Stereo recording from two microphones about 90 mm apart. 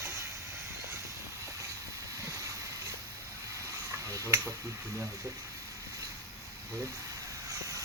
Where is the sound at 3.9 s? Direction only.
35° right (ahead or behind).